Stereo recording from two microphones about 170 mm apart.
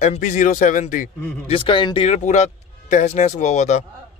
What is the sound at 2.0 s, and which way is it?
Speech, 45° left (ahead or behind).